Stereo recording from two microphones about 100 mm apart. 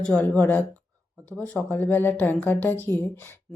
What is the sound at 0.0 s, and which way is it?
Speech, 15° left (ahead or behind).